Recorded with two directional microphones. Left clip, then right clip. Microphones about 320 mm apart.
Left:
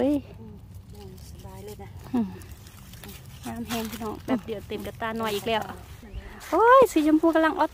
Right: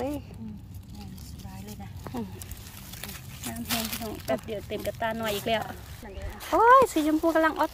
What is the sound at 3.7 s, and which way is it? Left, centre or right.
Speech, right.